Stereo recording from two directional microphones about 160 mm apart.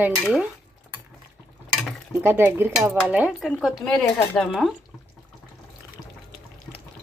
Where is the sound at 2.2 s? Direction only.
15° right (ahead or behind).